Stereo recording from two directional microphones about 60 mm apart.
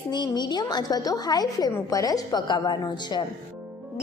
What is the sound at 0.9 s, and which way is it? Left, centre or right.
A woman's voice, left.